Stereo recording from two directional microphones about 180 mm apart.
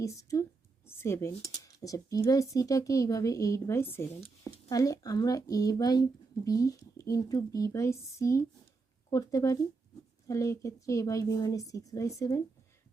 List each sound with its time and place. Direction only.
0.0 s speech: 15° left (ahead or behind)